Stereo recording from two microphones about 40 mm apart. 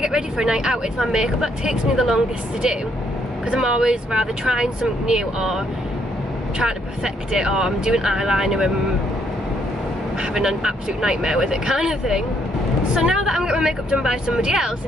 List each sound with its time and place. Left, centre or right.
0.0 s speech: centre
7.3 s speech: centre
10.3 s speech: centre